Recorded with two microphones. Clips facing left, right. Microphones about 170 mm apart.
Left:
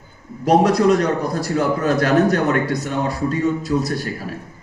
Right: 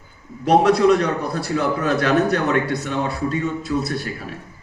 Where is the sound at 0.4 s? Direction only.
40° left (ahead or behind).